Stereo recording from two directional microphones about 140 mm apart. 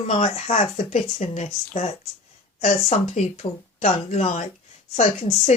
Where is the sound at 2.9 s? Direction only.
50° left (ahead or behind).